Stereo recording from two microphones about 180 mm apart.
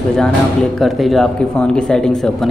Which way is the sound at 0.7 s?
Centre (ahead or behind).